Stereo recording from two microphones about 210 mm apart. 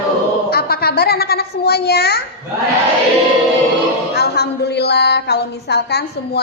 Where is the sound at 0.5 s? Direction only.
50° left (ahead or behind).